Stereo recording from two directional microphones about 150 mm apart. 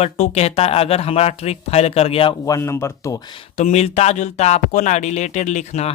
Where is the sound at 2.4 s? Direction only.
20° left (ahead or behind).